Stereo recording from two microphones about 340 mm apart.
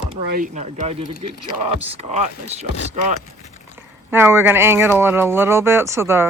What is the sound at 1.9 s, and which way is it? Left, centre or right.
Speech, centre.